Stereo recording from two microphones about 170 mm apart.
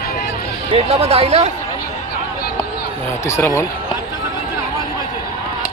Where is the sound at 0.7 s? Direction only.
35° right (ahead or behind).